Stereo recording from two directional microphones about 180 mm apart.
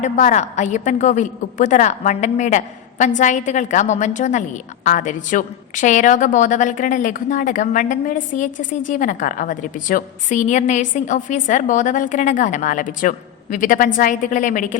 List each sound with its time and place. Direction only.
0.0 s a woman's voice: 45° left (ahead or behind)